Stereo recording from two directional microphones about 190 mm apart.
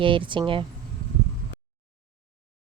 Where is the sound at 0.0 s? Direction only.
25° right (ahead or behind).